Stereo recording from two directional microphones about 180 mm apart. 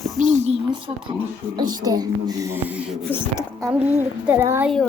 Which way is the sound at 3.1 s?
20° right (ahead or behind).